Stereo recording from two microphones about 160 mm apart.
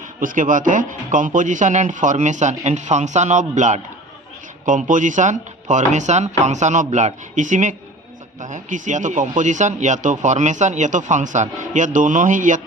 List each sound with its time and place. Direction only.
0.2 s speech: 55° right (ahead or behind)